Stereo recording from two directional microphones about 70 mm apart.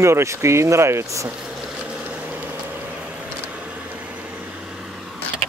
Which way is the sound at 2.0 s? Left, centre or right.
Right.